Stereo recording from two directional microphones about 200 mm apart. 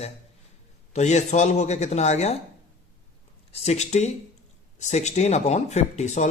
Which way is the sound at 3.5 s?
30° left (ahead or behind).